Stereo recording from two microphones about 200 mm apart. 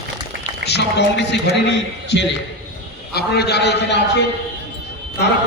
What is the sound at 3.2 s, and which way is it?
Speech, 55° left (ahead or behind).